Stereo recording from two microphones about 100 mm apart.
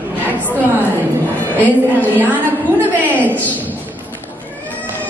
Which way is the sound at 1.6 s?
15° left (ahead or behind).